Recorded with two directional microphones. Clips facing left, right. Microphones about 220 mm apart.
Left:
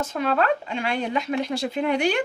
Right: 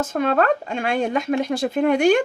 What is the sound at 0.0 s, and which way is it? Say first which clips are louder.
Speech: right 4 dB; 50° right (ahead or behind).